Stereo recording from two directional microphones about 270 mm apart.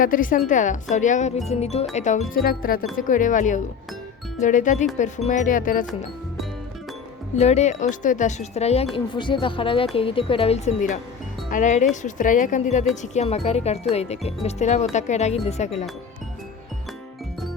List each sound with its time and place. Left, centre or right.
0.0 s speech: left
7.3 s speech: left